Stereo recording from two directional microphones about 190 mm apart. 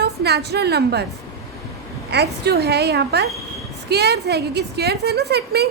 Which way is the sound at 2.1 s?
60° right (ahead or behind).